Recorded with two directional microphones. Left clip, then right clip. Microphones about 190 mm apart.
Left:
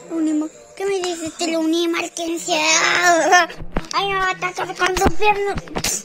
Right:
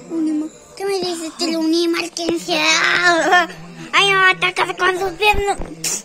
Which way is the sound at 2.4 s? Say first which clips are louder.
Right 1 dB; 15° left (ahead or behind).